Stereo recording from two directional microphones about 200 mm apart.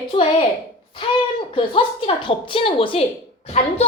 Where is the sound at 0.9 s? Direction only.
25° left (ahead or behind).